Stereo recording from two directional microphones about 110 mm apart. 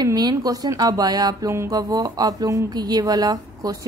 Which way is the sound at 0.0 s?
35° right (ahead or behind).